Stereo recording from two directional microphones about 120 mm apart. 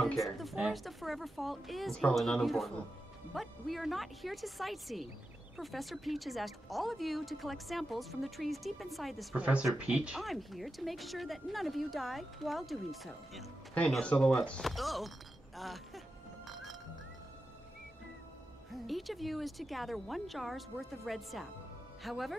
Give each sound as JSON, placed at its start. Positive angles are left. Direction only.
{"t": 0.0, "sound": "speech", "side_deg": 0}
{"t": 9.4, "sound": "speech", "side_deg": -10}
{"t": 16.4, "sound": "music", "side_deg": 0}
{"t": 18.7, "sound": "speech", "side_deg": 0}